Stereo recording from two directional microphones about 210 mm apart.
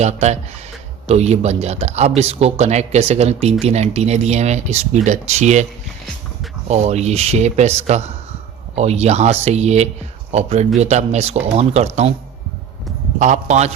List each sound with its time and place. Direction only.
0.0 s speech: 30° right (ahead or behind)
6.7 s speech: 30° right (ahead or behind)
13.1 s speech: 35° right (ahead or behind)